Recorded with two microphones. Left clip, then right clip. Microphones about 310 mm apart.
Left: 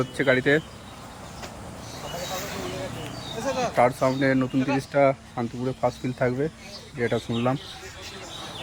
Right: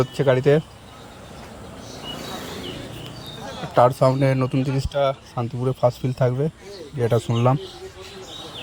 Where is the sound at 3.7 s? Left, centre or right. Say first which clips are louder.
Right 7 dB; right.